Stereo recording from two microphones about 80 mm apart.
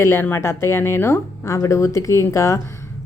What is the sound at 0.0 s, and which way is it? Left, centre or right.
Speech, left.